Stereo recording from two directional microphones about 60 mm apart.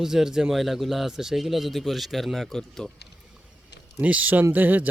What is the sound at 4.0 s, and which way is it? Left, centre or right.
Speech, right.